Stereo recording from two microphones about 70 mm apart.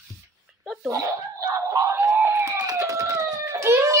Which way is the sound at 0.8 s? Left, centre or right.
Right.